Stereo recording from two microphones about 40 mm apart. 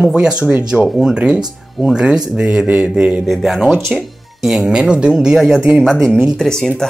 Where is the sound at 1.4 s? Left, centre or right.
Centre.